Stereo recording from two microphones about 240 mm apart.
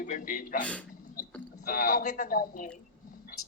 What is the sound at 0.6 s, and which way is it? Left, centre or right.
Speech, centre.